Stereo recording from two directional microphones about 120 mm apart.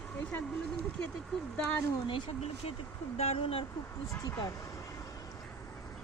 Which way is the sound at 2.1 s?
55° left (ahead or behind).